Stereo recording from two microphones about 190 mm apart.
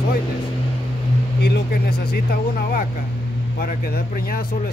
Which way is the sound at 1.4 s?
55° left (ahead or behind).